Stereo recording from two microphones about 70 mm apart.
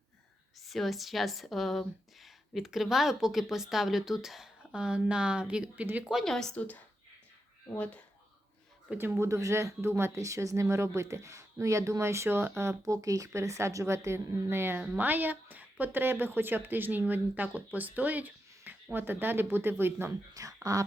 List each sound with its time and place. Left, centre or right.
0.6 s a woman's voice: centre
5.8 s a woman's voice: right
6.2 s a woman's voice: centre
9.0 s speech: right
10.2 s speech: right
12.8 s a woman's voice: right
20.3 s speech: right